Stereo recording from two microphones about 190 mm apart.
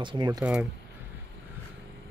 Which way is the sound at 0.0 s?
25° right (ahead or behind).